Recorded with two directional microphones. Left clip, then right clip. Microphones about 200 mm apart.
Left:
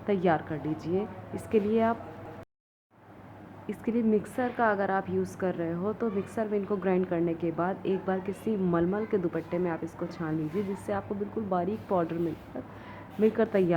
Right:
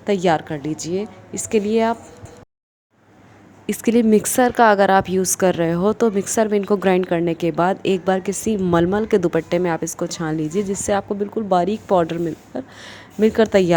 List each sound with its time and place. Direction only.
0.0 s speech: 30° right (ahead or behind)
3.7 s a woman's voice: 45° right (ahead or behind)